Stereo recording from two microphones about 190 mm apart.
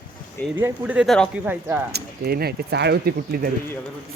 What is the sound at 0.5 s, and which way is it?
Speech, 10° right (ahead or behind).